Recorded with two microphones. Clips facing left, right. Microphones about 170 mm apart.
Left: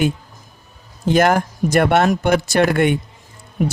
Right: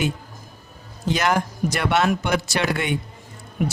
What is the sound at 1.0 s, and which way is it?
Speech, 50° left (ahead or behind).